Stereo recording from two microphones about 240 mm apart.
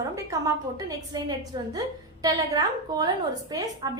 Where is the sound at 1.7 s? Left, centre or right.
Centre.